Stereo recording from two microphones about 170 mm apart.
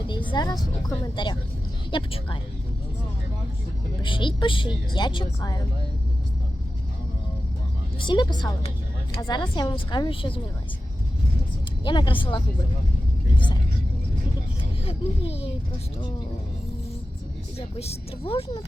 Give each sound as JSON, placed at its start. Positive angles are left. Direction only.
{"t": 0.1, "sound": "a woman's voice", "side_deg": 30}
{"t": 4.0, "sound": "a woman's voice", "side_deg": 30}
{"t": 7.9, "sound": "a woman's voice", "side_deg": 25}
{"t": 11.9, "sound": "a woman's voice", "side_deg": 30}
{"t": 14.8, "sound": "speech", "side_deg": 35}
{"t": 17.7, "sound": "speech", "side_deg": 35}